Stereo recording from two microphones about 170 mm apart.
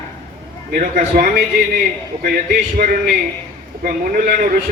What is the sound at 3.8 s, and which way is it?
Speech, 55° right (ahead or behind).